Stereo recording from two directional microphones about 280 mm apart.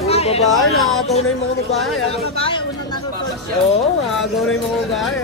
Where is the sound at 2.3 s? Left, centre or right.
Centre.